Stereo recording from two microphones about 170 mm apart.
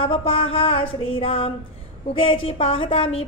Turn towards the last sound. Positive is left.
turn(degrees=35)  # may be behind; listen again after turning